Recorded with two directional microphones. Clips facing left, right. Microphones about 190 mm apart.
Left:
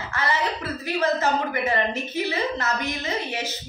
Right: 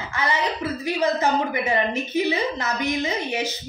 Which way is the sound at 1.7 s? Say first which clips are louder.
Right 3 dB; 15° right (ahead or behind).